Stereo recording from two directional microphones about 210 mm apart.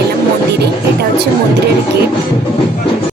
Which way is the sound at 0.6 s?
50° right (ahead or behind).